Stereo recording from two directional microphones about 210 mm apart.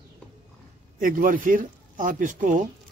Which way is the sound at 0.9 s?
40° right (ahead or behind).